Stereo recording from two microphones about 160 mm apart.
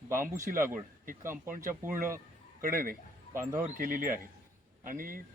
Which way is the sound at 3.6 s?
60° right (ahead or behind).